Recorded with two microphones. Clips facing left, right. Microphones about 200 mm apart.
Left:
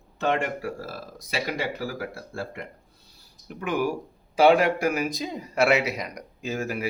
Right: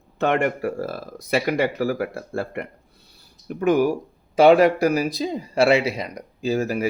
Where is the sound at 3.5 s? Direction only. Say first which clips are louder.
Right 8 dB; 45° right (ahead or behind).